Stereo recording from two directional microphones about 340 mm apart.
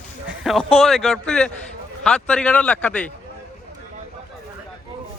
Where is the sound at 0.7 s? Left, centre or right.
Centre.